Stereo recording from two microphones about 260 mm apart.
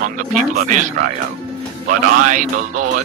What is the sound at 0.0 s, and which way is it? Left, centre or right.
A man's voice, right.